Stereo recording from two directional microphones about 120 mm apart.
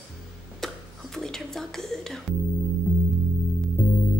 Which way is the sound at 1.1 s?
5° left (ahead or behind).